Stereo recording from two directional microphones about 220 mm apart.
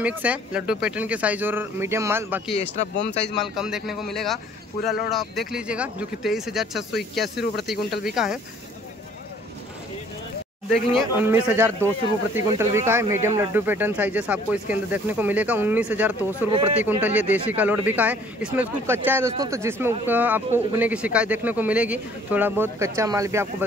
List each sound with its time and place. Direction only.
0.0 s speech: 5° right (ahead or behind)
2.5 s speech: 30° left (ahead or behind)
3.0 s speech: 50° left (ahead or behind)
3.3 s speech: centre (ahead or behind)
10.7 s speech: centre (ahead or behind)
11.2 s speech: 10° right (ahead or behind)